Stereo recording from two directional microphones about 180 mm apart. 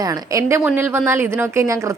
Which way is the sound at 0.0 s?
20° right (ahead or behind).